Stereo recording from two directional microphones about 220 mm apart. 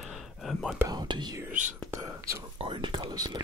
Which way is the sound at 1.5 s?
35° right (ahead or behind).